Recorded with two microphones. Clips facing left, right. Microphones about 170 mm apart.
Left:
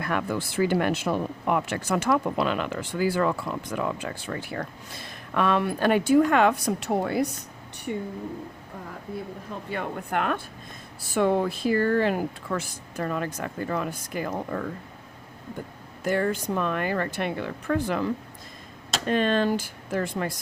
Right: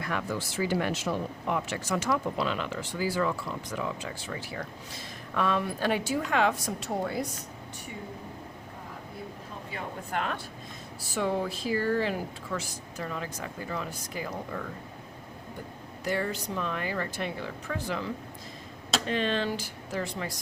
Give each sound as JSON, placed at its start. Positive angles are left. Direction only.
{"t": 0.0, "sound": "speech", "side_deg": 60}
{"t": 9.6, "sound": "speech", "side_deg": 60}
{"t": 16.0, "sound": "speech", "side_deg": 50}